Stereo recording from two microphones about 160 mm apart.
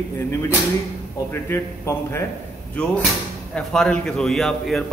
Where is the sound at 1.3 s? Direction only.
15° left (ahead or behind).